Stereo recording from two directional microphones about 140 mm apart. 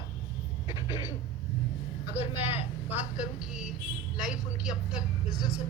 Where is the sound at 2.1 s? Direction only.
15° right (ahead or behind).